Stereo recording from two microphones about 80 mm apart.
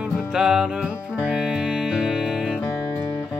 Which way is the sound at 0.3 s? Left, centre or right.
Centre.